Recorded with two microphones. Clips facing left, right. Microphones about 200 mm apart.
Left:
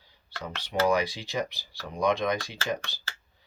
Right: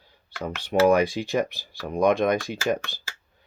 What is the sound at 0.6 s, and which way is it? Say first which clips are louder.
Speech: right 6 dB; 55° right (ahead or behind).